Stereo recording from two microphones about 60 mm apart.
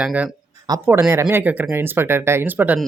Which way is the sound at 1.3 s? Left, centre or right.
Right.